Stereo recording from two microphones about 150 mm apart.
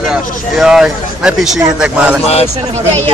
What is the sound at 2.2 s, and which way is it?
Speech, 45° left (ahead or behind).